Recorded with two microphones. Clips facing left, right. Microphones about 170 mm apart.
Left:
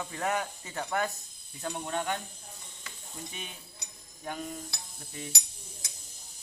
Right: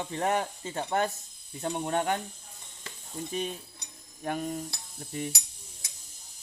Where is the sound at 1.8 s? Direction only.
45° right (ahead or behind).